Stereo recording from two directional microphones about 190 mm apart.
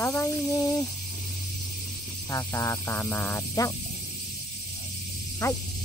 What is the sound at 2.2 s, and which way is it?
Speech, 20° left (ahead or behind).